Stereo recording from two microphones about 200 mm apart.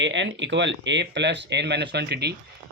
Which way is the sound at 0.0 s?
65° right (ahead or behind).